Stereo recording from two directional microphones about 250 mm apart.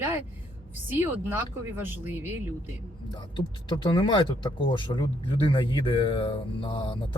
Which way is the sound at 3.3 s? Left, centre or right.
Centre.